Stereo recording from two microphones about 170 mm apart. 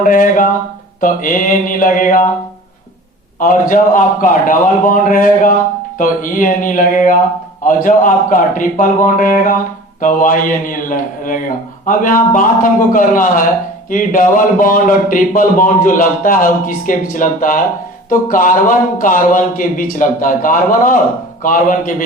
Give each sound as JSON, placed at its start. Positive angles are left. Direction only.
{"t": 0.0, "sound": "speech", "side_deg": 50}
{"t": 3.4, "sound": "speech", "side_deg": 50}